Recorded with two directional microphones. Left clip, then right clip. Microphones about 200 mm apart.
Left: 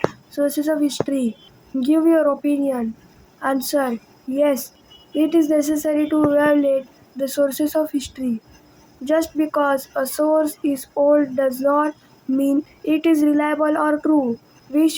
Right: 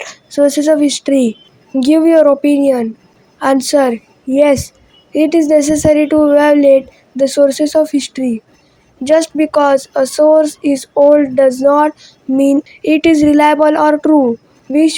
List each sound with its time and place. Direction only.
0.1 s speech: 35° right (ahead or behind)